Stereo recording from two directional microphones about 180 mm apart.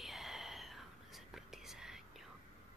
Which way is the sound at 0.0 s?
Centre (ahead or behind).